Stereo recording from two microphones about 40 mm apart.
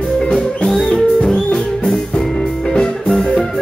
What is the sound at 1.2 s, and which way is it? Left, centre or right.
Music, centre.